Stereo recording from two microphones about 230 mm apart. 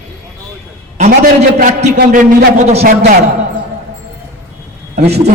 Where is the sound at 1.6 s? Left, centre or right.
Right.